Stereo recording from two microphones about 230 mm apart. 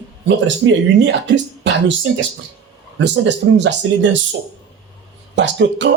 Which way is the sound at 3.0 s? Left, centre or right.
Right.